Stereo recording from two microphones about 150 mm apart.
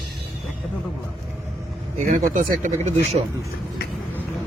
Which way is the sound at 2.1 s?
60° right (ahead or behind).